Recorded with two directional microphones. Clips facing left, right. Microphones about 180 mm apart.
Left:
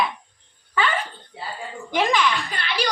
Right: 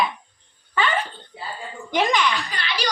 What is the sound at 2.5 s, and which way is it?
Speech, 55° left (ahead or behind).